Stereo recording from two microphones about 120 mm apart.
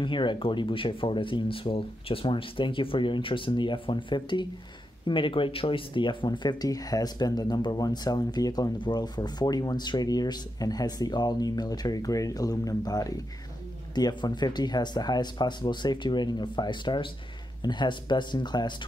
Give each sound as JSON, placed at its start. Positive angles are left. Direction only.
{"t": 0.0, "sound": "speech", "side_deg": 40}